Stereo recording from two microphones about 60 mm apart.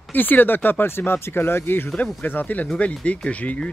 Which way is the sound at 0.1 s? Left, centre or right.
Left.